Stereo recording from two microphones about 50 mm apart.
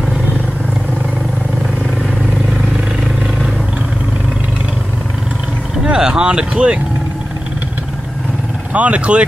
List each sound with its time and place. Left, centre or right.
5.9 s vehicle: centre
8.7 s speech: right